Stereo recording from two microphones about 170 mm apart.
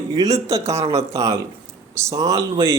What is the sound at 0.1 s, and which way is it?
A man's voice, 20° right (ahead or behind).